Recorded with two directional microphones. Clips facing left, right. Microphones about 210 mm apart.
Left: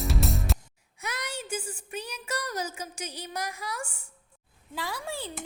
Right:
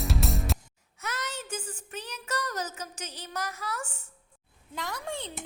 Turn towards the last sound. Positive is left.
turn(degrees=5)  # may be behind; listen again after turning